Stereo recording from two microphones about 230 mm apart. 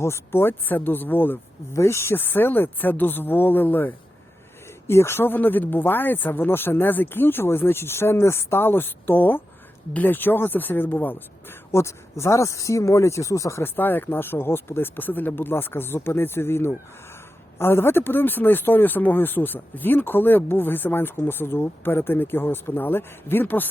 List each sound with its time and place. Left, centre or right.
0.0 s speech: centre